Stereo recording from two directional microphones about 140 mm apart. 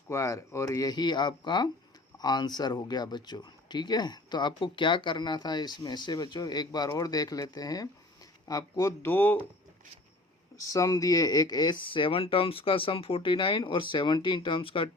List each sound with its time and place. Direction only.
0.1 s speech: 20° left (ahead or behind)
10.6 s speech: 25° left (ahead or behind); by 14.8 s 40° left (ahead or behind)